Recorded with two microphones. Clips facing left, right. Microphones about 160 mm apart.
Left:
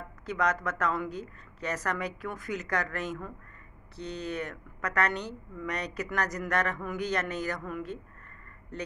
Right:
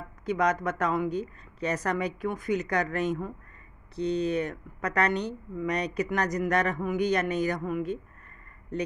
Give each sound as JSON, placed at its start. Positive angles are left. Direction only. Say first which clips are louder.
{"t": 0.2, "sound": "a woman's voice", "louder": "right 4 dB", "side_deg": -15}